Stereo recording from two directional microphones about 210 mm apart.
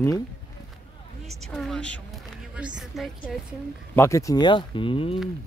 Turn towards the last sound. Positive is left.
turn(degrees=25)  # may be behind; listen again after turning